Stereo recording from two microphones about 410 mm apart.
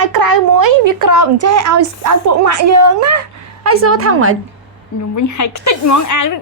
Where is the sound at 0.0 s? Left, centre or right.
Right.